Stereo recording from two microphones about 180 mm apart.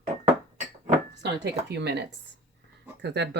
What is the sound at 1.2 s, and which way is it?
Speech, 70° right (ahead or behind).